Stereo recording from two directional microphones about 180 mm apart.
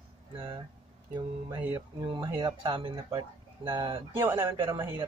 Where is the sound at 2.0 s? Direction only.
25° right (ahead or behind).